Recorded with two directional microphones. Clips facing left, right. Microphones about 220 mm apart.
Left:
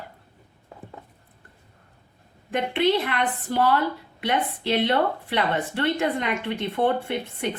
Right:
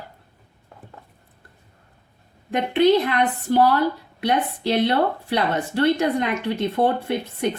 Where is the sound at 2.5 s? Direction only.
40° right (ahead or behind).